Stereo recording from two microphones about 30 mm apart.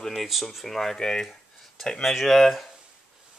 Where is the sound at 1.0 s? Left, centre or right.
Left.